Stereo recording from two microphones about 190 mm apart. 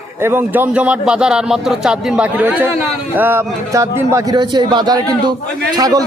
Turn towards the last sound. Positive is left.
turn(degrees=-20)  # may be behind; listen again after turning